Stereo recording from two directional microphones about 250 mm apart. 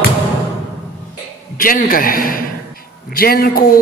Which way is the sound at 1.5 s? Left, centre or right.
Left.